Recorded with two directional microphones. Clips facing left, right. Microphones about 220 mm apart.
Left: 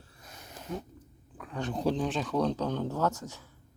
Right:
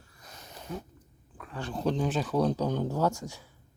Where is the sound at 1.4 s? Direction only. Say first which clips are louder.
Left 2 dB; 15° left (ahead or behind).